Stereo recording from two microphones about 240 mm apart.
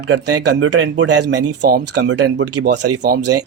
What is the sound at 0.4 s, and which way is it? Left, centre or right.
Speech, right.